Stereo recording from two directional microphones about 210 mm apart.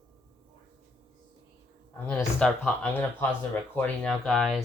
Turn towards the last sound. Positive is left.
turn(degrees=0)  # may be behind; listen again after turning